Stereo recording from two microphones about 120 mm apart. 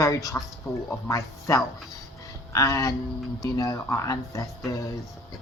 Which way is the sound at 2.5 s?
30° left (ahead or behind).